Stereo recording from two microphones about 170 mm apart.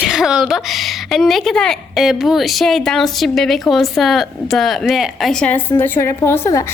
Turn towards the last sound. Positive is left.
turn(degrees=15)  # may be behind; listen again after turning